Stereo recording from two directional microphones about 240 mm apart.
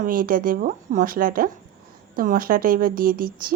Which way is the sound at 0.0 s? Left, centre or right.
Right.